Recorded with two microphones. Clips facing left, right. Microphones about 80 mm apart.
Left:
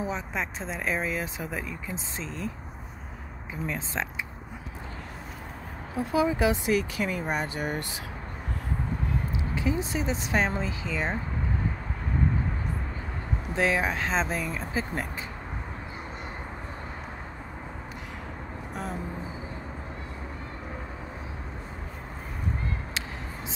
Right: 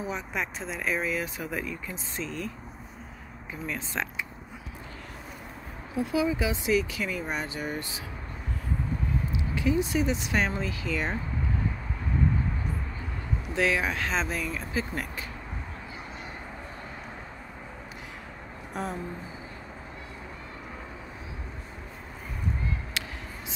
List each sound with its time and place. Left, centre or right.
0.0 s speech: left
3.6 s speech: left
5.9 s speech: left
9.6 s speech: left
13.6 s speech: left
18.8 s speech: centre